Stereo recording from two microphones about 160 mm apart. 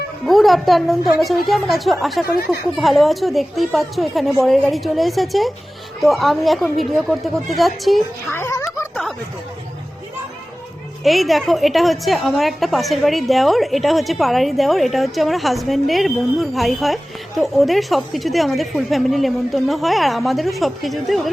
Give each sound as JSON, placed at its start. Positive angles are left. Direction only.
{"t": 0.3, "sound": "a woman's voice", "side_deg": 0}
{"t": 8.3, "sound": "speech", "side_deg": 15}
{"t": 11.0, "sound": "a woman's voice", "side_deg": 0}